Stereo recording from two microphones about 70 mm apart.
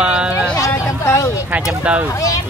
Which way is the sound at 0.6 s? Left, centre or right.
Left.